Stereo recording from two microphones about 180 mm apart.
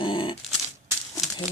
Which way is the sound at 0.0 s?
30° left (ahead or behind).